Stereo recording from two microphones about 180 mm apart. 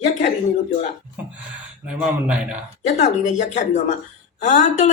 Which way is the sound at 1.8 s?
5° right (ahead or behind).